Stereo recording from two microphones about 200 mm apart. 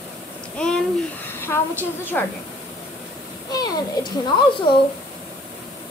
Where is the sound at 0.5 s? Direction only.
5° left (ahead or behind).